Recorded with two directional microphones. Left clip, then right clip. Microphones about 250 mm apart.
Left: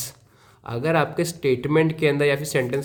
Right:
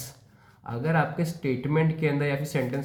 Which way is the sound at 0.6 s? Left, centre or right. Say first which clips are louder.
Left 5 dB; left.